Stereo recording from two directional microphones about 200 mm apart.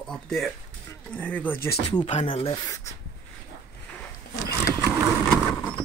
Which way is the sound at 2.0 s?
30° left (ahead or behind).